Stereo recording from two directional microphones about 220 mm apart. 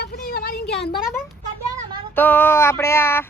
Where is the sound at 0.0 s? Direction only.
45° left (ahead or behind).